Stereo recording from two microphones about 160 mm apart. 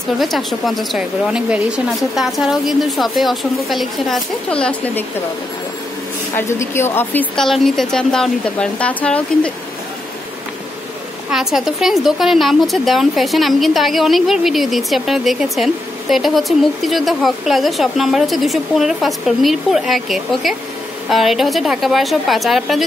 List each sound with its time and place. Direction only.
0.2 s a woman's voice: centre (ahead or behind)
6.3 s a woman's voice: 15° left (ahead or behind)
11.2 s a woman's voice: 5° right (ahead or behind)